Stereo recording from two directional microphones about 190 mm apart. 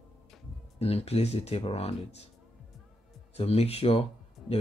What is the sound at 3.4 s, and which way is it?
Speech, 35° left (ahead or behind).